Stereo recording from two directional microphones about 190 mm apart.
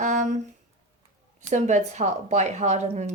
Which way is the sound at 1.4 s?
40° right (ahead or behind).